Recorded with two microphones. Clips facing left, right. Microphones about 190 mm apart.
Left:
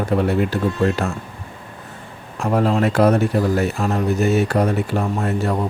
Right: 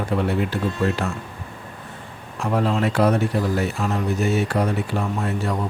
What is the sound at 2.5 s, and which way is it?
Speech, 45° left (ahead or behind).